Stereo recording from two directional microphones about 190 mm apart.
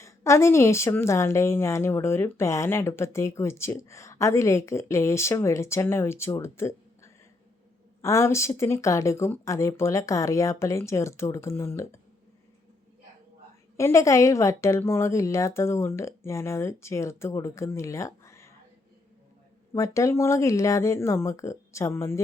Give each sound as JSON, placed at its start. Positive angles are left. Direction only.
{"t": 0.0, "sound": "a woman's voice", "side_deg": 15}
{"t": 13.7, "sound": "a woman's voice", "side_deg": 15}
{"t": 19.7, "sound": "a woman's voice", "side_deg": 15}